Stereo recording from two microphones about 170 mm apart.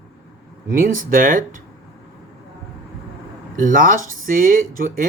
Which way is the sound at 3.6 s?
50° right (ahead or behind).